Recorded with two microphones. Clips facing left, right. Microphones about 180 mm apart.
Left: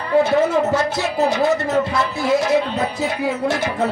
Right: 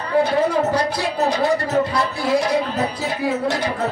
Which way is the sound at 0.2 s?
25° left (ahead or behind).